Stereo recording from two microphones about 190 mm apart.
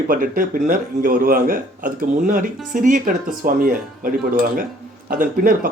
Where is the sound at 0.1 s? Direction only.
45° right (ahead or behind).